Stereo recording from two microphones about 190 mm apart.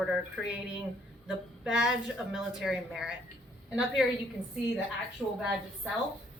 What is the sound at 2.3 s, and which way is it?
Speech, centre (ahead or behind).